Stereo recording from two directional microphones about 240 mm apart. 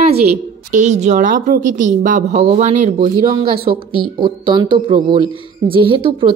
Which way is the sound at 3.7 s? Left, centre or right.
Centre.